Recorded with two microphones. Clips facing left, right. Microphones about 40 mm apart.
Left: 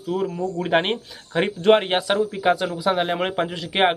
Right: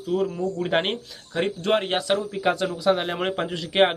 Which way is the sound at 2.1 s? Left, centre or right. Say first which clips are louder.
Left 4 dB; centre.